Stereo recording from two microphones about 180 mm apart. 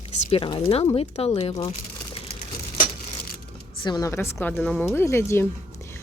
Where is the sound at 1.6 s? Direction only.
35° left (ahead or behind).